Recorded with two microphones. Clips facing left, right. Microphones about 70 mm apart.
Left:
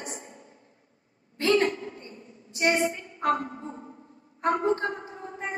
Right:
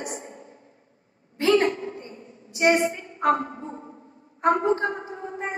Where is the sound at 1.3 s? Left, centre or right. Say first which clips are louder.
Right 3 dB; right.